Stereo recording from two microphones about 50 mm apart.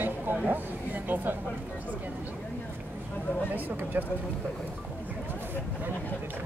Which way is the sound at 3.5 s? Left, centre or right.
Right.